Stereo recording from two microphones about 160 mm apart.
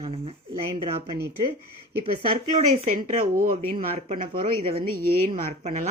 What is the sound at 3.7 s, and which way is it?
Speech, 40° right (ahead or behind).